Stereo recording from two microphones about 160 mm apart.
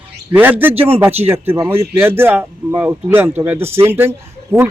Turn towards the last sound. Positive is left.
turn(degrees=-15)  # may be behind; listen again after turning